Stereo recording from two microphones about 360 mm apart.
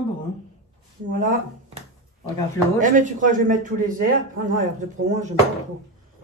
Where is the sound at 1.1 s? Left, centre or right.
Right.